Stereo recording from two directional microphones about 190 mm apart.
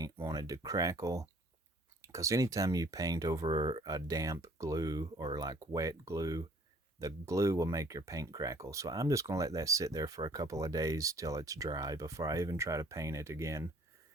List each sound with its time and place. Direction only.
0.0 s speech: 20° right (ahead or behind)